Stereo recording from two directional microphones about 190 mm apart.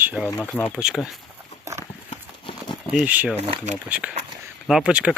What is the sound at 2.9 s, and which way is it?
Speech, 5° right (ahead or behind).